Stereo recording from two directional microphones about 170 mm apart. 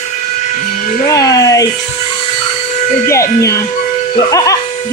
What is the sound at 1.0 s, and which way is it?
Speech, 20° left (ahead or behind).